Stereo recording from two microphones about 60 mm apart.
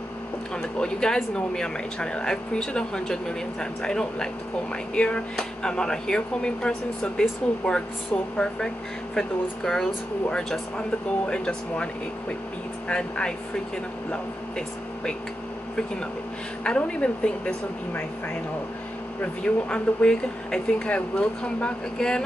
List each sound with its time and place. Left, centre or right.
0.6 s speech: centre
10.3 s speech: centre
16.6 s speech: centre
19.4 s speech: centre